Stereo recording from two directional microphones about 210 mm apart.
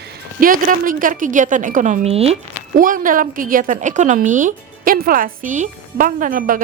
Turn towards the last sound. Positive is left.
turn(degrees=-40)  # may be behind; listen again after turning